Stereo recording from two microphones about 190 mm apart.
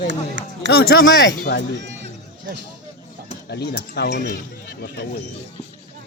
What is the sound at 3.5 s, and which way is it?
Speech, 60° left (ahead or behind).